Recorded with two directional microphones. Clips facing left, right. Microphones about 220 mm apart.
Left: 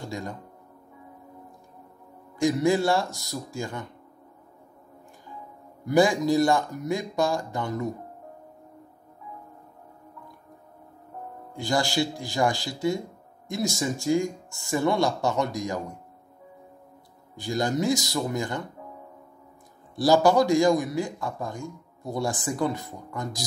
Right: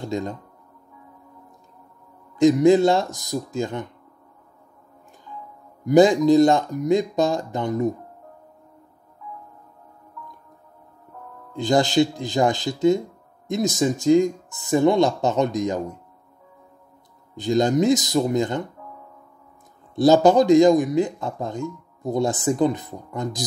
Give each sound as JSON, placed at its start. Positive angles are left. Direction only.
{"t": 0.1, "sound": "speech", "side_deg": -20}
{"t": 2.3, "sound": "speech", "side_deg": -20}
{"t": 5.9, "sound": "speech", "side_deg": -20}
{"t": 11.5, "sound": "speech", "side_deg": -20}
{"t": 17.4, "sound": "speech", "side_deg": -20}
{"t": 20.0, "sound": "speech", "side_deg": -20}